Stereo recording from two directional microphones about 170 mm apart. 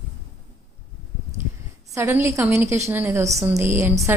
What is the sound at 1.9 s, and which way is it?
A woman's voice, 15° right (ahead or behind).